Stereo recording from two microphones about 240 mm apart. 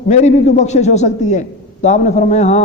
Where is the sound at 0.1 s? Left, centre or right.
Left.